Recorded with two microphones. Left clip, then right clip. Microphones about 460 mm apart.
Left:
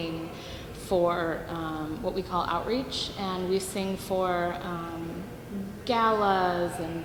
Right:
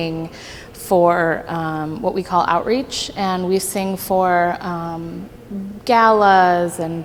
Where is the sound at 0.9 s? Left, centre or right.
Right.